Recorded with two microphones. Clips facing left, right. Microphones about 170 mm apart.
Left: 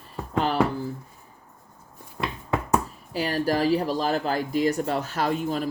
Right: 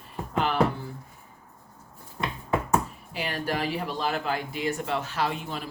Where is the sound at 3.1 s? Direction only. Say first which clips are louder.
Left 6 dB; 40° left (ahead or behind).